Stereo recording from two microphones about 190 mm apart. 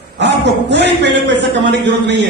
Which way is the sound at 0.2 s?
65° right (ahead or behind).